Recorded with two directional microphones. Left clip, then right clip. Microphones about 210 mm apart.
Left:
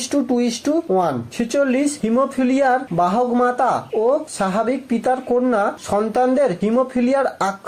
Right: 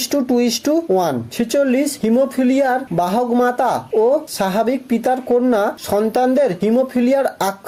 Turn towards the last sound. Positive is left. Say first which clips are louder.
# right 2 dB
turn(degrees=-40)  # may be behind; listen again after turning